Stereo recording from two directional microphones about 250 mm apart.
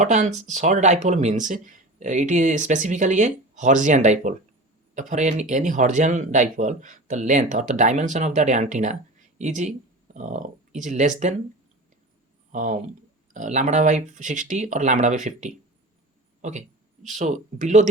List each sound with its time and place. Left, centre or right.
0.0 s speech: right
12.5 s speech: right